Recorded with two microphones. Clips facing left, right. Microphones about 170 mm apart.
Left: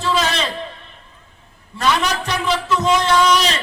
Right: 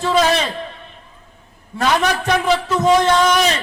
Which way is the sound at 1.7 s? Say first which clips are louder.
Right 2 dB; 55° right (ahead or behind).